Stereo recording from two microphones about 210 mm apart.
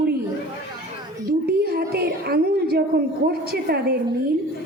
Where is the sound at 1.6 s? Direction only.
50° right (ahead or behind).